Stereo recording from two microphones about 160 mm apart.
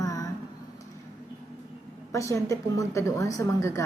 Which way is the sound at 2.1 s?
20° left (ahead or behind).